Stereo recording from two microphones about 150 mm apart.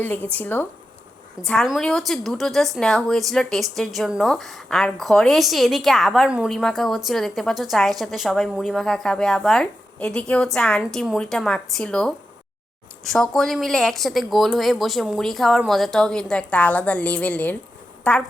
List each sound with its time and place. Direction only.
0.0 s speech: 10° left (ahead or behind)
1.4 s a woman's voice: centre (ahead or behind)